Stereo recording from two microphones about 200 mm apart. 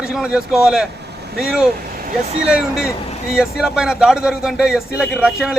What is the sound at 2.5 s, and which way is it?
A man's voice, 5° right (ahead or behind).